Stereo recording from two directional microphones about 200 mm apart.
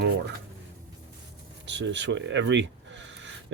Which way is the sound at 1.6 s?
65° right (ahead or behind).